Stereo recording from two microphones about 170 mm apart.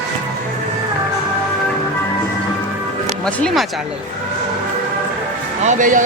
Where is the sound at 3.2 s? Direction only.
5° left (ahead or behind).